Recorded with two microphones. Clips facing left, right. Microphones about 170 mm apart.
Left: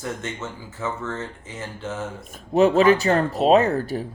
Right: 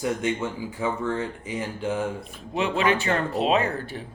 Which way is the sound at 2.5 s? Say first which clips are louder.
Left 8 dB; 40° left (ahead or behind).